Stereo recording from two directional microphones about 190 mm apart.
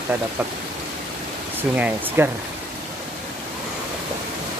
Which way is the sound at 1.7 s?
10° right (ahead or behind).